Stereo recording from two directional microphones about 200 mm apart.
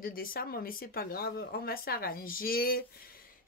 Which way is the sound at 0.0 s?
45° left (ahead or behind).